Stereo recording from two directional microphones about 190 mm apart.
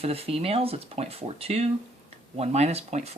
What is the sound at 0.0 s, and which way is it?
Speech, 30° right (ahead or behind).